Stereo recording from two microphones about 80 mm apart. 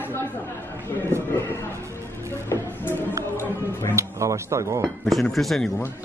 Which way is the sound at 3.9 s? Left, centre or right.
Right.